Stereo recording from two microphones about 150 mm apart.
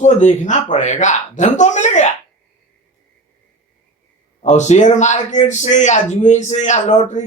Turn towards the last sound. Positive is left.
turn(degrees=50)  # may be behind; listen again after turning